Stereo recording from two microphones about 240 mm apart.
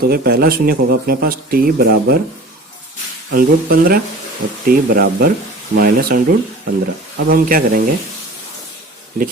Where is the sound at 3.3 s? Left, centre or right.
Right.